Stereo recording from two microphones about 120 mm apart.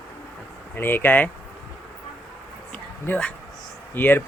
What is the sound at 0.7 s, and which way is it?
Speech, 15° left (ahead or behind).